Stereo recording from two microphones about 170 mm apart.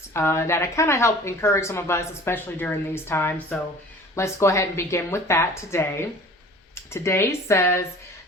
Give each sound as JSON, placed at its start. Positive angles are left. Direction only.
{"t": 0.1, "sound": "a woman's voice", "side_deg": 15}